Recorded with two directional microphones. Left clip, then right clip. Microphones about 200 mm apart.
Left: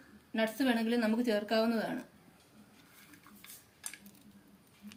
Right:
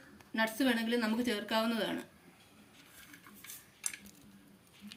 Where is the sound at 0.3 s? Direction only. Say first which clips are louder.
Even; 40° left (ahead or behind).